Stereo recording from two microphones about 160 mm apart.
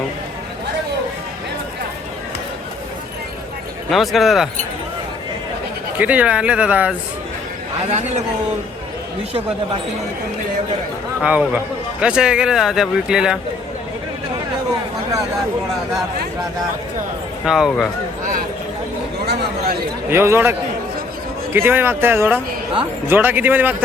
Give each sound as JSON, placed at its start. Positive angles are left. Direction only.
{"t": 3.8, "sound": "a man's voice", "side_deg": 0}
{"t": 6.0, "sound": "speech", "side_deg": -10}
{"t": 11.2, "sound": "a man's voice", "side_deg": -5}
{"t": 17.4, "sound": "a man's voice", "side_deg": -5}
{"t": 19.3, "sound": "a sound", "side_deg": -75}
{"t": 20.1, "sound": "speech", "side_deg": -15}